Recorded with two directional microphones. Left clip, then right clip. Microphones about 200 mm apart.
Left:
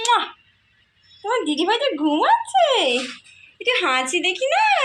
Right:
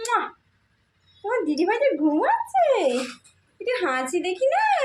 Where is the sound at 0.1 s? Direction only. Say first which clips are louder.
Left 3 dB; 5° right (ahead or behind).